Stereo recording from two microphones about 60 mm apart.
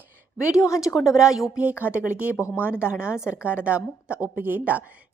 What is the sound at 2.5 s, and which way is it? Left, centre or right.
Speech, left.